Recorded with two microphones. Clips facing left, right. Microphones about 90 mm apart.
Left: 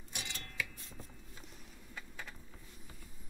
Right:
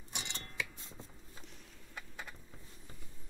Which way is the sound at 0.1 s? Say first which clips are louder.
Right 1 dB; 25° right (ahead or behind).